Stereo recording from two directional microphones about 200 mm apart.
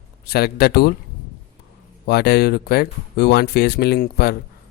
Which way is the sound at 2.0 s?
55° left (ahead or behind).